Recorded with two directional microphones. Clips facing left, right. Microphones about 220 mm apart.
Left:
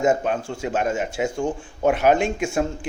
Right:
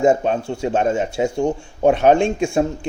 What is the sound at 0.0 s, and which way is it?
A man's voice, 25° right (ahead or behind).